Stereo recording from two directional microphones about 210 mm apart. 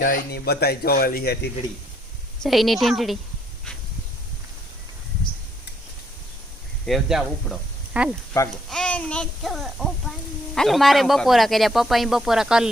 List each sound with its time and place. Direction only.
0.0 s speech: 45° left (ahead or behind)
2.4 s speech: centre (ahead or behind)
6.8 s speech: centre (ahead or behind)
8.4 s speech: 15° left (ahead or behind)
8.7 s speech: 5° left (ahead or behind)